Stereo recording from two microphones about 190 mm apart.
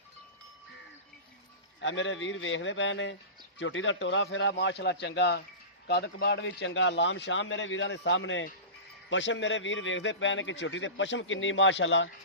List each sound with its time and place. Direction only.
1.8 s a man's voice: 75° left (ahead or behind)